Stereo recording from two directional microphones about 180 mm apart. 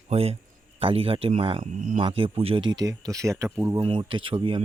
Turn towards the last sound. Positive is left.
turn(degrees=-30)  # may be behind; listen again after turning